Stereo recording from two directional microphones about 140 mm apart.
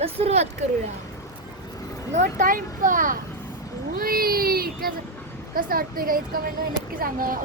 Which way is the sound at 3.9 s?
90° right.